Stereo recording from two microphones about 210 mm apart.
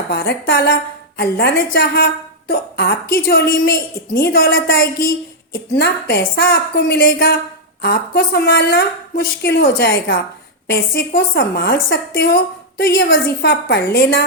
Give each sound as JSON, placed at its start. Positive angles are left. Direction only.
{"t": 0.1, "sound": "a woman's voice", "side_deg": 50}